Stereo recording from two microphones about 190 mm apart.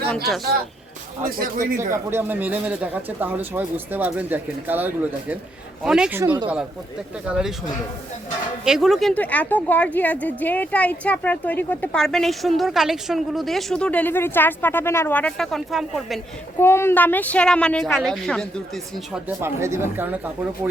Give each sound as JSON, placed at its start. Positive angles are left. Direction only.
{"t": 1.2, "sound": "speech", "side_deg": -50}
{"t": 1.9, "sound": "speech", "side_deg": -10}
{"t": 8.6, "sound": "a woman's voice", "side_deg": 0}
{"t": 16.6, "sound": "a woman's voice", "side_deg": 10}
{"t": 19.1, "sound": "speech", "side_deg": -10}